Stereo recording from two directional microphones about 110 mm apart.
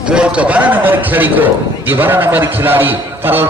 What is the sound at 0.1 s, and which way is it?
A man's voice, 10° right (ahead or behind).